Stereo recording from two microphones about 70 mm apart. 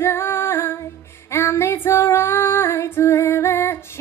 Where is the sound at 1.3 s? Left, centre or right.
Left.